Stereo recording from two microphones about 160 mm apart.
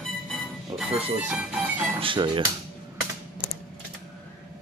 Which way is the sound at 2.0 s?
30° right (ahead or behind).